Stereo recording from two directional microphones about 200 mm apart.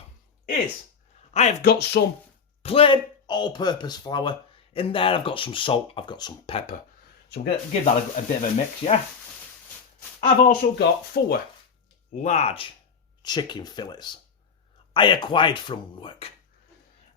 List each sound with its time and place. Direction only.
1.3 s speech: 35° left (ahead or behind)
1.6 s speech: 55° left (ahead or behind)
2.6 s speech: 25° left (ahead or behind)
7.3 s speech: 55° left (ahead or behind)
7.7 s speech: 35° left (ahead or behind)
10.2 s speech: 40° left (ahead or behind)
10.8 s speech: 50° left (ahead or behind)
12.1 s speech: 35° left (ahead or behind)
13.2 s speech: 20° left (ahead or behind)